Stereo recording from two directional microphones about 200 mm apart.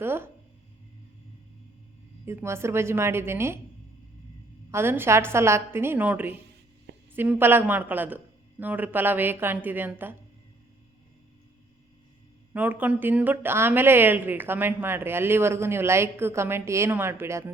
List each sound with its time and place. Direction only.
0.0 s speech: 10° right (ahead or behind)
2.2 s a woman's voice: 15° right (ahead or behind)
4.7 s a woman's voice: 10° right (ahead or behind)
12.5 s a woman's voice: 10° right (ahead or behind)